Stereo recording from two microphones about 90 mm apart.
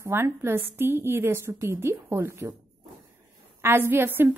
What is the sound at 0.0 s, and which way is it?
A woman's voice, 25° right (ahead or behind).